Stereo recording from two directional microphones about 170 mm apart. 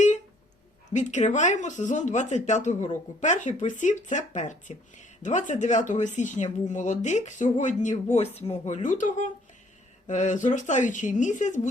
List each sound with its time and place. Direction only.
0.9 s speech: 45° left (ahead or behind)